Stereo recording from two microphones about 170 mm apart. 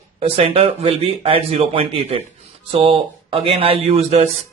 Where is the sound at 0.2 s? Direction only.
35° right (ahead or behind).